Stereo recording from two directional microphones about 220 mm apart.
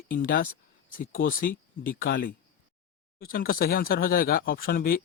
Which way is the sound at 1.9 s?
45° left (ahead or behind).